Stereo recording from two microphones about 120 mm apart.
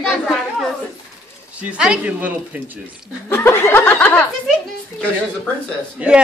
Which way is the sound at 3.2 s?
20° left (ahead or behind).